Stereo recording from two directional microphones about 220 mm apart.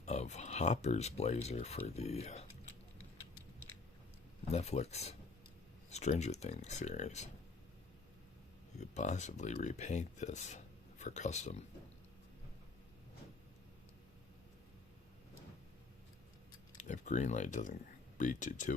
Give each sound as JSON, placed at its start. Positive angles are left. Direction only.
{"t": 0.0, "sound": "speech", "side_deg": 30}
{"t": 4.5, "sound": "speech", "side_deg": 30}
{"t": 8.8, "sound": "speech", "side_deg": 30}
{"t": 16.7, "sound": "speech", "side_deg": 35}